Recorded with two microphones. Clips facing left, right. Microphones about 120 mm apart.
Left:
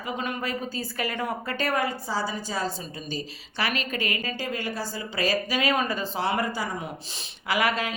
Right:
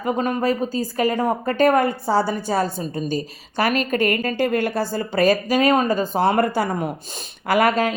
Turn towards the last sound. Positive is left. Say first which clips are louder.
# right 8 dB
turn(degrees=-45)  # may be behind; listen again after turning